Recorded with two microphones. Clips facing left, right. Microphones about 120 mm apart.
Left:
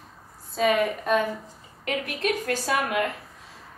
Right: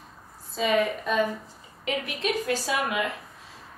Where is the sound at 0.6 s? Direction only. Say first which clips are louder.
Left 2 dB; 60° left (ahead or behind).